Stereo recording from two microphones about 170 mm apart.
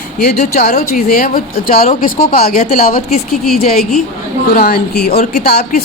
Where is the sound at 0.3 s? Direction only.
50° left (ahead or behind).